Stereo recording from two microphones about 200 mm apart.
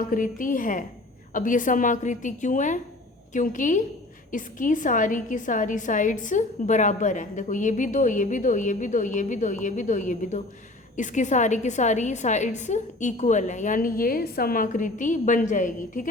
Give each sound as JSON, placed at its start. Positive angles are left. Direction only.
{"t": 0.1, "sound": "a woman's voice", "side_deg": 40}